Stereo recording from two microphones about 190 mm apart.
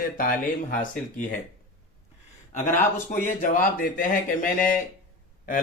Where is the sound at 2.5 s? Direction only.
40° left (ahead or behind).